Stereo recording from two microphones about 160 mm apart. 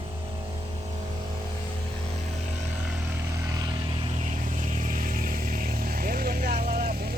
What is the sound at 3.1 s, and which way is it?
Vehicle, 20° right (ahead or behind).